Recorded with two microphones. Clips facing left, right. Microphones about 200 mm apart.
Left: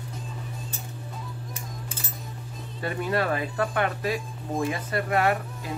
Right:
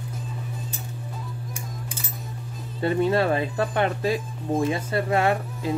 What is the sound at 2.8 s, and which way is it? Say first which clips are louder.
Speech: right 6 dB; 25° right (ahead or behind).